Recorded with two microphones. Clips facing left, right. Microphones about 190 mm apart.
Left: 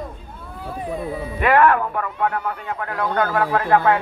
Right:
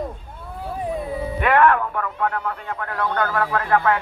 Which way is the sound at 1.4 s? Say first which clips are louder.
Left 1 dB; 5° left (ahead or behind).